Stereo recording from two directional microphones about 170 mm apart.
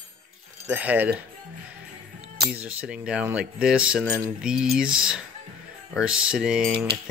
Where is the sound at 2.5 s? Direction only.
10° right (ahead or behind).